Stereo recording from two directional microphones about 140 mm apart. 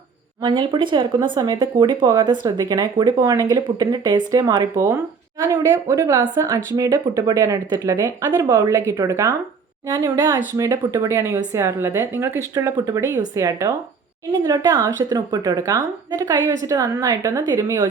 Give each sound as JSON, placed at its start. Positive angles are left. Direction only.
{"t": 0.4, "sound": "speech", "side_deg": -35}
{"t": 12.5, "sound": "speech", "side_deg": -25}